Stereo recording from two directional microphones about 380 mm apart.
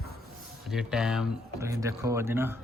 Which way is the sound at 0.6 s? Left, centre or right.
Centre.